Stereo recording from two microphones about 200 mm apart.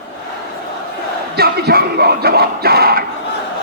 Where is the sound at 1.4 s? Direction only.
50° right (ahead or behind).